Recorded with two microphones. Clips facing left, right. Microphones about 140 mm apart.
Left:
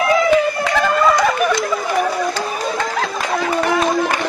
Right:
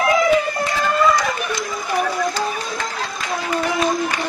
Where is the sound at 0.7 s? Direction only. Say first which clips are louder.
Left 2 dB; 65° left (ahead or behind).